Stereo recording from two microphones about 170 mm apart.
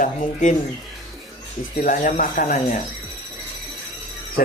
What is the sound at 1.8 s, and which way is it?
Speech, 50° left (ahead or behind).